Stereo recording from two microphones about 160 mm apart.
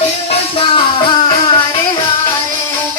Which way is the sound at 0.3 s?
35° left (ahead or behind).